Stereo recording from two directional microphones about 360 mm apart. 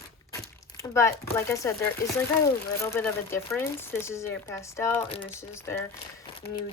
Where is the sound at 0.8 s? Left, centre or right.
Centre.